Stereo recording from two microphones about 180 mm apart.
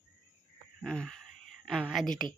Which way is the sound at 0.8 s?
5° left (ahead or behind).